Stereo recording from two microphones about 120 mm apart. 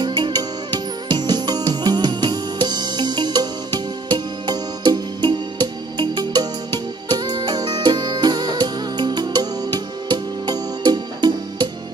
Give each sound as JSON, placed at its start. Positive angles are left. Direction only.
{"t": 0.0, "sound": "music", "side_deg": -40}